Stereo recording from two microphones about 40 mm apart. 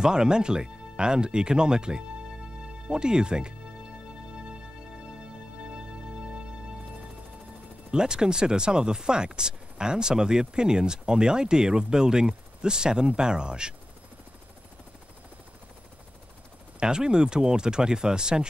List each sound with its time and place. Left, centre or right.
0.0 s speech: centre
2.6 s music: right
5.6 s music: right
7.9 s speech: centre
16.8 s speech: centre